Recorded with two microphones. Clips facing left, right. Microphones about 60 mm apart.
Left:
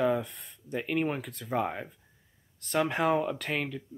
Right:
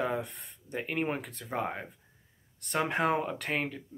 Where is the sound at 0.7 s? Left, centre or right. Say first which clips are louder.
Left 2 dB; centre.